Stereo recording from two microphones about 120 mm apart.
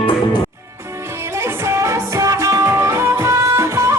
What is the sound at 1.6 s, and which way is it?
Music, 25° right (ahead or behind).